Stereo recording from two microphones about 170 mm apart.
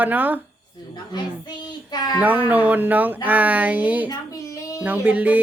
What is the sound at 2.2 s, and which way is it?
Speech, 10° right (ahead or behind).